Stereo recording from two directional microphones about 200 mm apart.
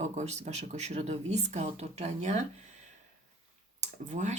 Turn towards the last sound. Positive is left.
turn(degrees=-35)  # may be behind; listen again after turning